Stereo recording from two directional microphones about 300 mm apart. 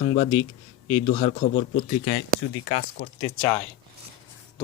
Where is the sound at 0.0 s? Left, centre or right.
Centre.